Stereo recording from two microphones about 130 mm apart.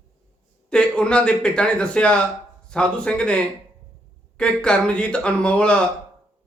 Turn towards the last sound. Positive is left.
turn(degrees=10)  # may be behind; listen again after turning